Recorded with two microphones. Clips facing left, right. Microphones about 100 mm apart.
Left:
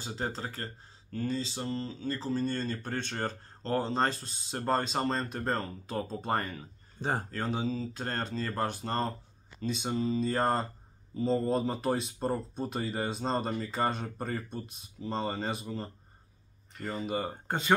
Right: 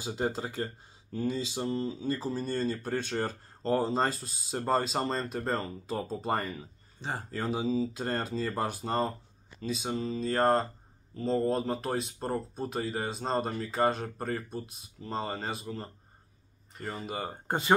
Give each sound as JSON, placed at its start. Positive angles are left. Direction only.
{"t": 0.0, "sound": "speech", "side_deg": -10}
{"t": 7.0, "sound": "speech", "side_deg": 40}
{"t": 7.2, "sound": "speech", "side_deg": -5}